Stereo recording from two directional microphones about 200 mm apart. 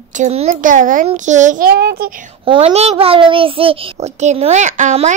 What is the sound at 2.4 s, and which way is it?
A woman's voice, 30° right (ahead or behind).